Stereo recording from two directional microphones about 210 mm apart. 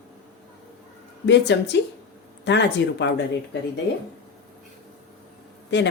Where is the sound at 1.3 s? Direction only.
55° left (ahead or behind).